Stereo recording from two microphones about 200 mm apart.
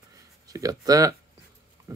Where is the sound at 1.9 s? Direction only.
15° right (ahead or behind).